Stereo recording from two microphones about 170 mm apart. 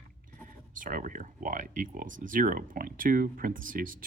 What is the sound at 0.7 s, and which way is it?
Speech, 50° right (ahead or behind).